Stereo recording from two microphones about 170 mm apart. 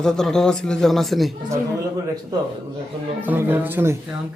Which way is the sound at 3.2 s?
10° right (ahead or behind).